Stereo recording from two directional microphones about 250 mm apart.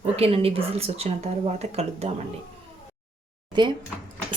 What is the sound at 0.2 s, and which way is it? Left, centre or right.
Speech, right.